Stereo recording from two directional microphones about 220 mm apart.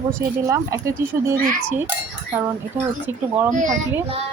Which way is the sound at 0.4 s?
15° right (ahead or behind).